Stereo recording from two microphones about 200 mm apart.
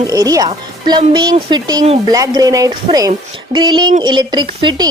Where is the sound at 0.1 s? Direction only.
20° right (ahead or behind).